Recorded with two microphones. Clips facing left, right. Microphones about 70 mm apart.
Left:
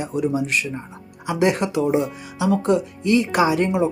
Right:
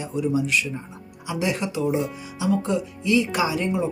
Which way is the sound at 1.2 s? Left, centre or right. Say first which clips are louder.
Left 6 dB; left.